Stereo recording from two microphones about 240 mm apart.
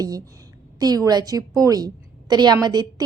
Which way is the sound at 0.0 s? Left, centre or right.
Centre.